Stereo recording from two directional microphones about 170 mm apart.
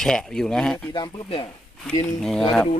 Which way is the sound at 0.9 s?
25° left (ahead or behind).